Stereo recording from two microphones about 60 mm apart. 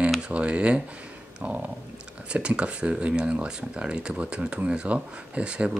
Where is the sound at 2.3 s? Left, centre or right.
Centre.